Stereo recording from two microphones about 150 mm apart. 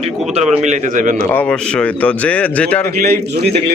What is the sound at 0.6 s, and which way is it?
Speech, 55° right (ahead or behind).